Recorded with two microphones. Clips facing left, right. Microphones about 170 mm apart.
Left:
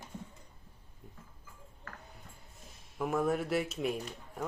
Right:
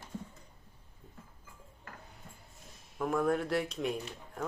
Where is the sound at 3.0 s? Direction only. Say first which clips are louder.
Right 1 dB; 5° left (ahead or behind).